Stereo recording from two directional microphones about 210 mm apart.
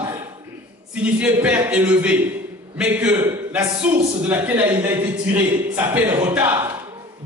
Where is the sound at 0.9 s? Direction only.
5° right (ahead or behind).